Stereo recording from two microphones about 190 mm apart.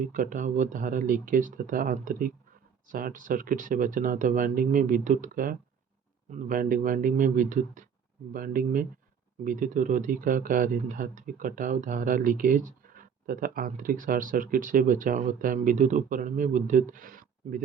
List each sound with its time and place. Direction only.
0.0 s speech: 45° right (ahead or behind)